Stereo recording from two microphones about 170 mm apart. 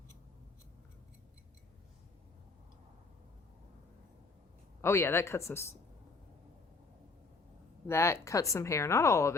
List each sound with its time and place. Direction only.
4.8 s speech: 15° left (ahead or behind)
7.9 s speech: 15° left (ahead or behind)